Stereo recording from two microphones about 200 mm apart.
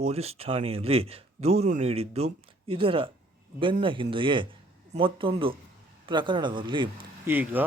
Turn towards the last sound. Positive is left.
turn(degrees=-10)  # may be behind; listen again after turning